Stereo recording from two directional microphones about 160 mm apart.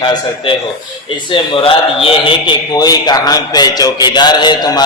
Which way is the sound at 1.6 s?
35° left (ahead or behind).